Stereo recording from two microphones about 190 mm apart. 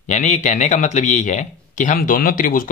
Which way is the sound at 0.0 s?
40° left (ahead or behind).